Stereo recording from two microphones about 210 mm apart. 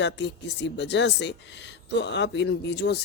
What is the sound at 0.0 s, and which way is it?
Speech, 55° left (ahead or behind).